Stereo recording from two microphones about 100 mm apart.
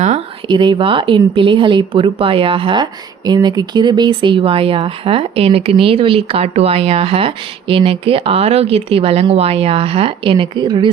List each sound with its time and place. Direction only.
0.4 s speech: 55° right (ahead or behind)